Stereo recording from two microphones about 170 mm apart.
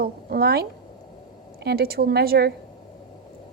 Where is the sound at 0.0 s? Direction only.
65° right (ahead or behind).